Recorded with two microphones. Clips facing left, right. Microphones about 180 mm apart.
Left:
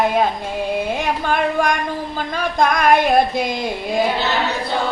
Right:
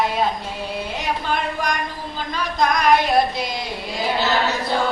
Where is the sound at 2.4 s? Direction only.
50° left (ahead or behind).